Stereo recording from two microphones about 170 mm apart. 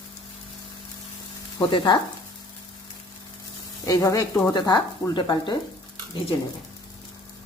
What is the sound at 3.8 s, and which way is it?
Speech, 20° left (ahead or behind).